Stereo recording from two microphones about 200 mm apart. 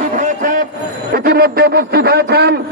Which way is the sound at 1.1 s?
50° right (ahead or behind).